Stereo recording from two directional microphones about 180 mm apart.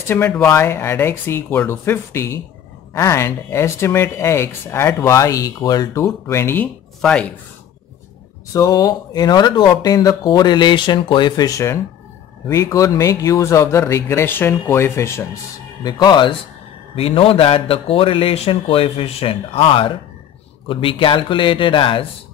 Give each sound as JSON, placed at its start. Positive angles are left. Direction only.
{"t": 0.3, "sound": "speech", "side_deg": 5}
{"t": 8.5, "sound": "a man's voice", "side_deg": 20}